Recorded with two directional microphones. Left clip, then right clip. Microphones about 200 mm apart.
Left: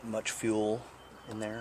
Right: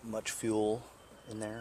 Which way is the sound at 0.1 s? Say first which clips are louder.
Left 2 dB; 20° right (ahead or behind).